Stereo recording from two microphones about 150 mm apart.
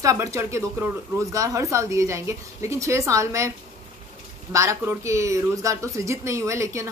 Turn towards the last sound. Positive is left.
turn(degrees=-20)  # may be behind; listen again after turning